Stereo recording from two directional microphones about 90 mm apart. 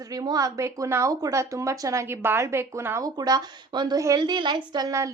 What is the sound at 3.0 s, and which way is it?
Speech, 50° right (ahead or behind).